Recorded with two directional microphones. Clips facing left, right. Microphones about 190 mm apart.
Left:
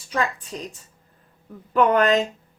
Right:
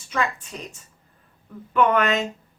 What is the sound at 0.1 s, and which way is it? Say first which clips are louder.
A woman's voice: left 1 dB; 35° left (ahead or behind).